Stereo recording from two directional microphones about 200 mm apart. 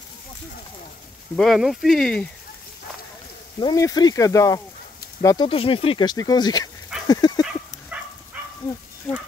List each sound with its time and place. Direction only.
1.3 s speech: centre (ahead or behind)
3.5 s speech: 20° left (ahead or behind)
7.1 s dog: 20° left (ahead or behind)
7.9 s dog: 10° right (ahead or behind)